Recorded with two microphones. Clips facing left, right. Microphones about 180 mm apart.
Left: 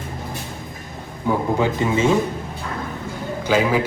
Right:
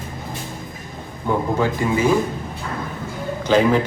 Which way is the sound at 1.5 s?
20° left (ahead or behind).